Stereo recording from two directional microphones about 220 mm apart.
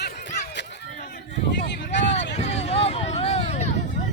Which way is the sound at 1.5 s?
55° left (ahead or behind).